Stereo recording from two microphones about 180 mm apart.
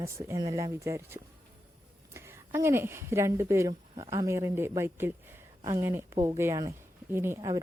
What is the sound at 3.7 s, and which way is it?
Speech, 25° right (ahead or behind).